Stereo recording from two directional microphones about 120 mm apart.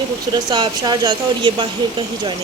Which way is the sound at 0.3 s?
40° right (ahead or behind).